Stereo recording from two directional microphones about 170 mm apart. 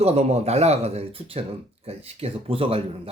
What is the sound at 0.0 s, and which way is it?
Speech, 40° right (ahead or behind).